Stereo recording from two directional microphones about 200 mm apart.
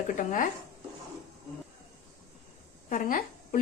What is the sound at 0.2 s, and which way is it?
Speech, 40° left (ahead or behind).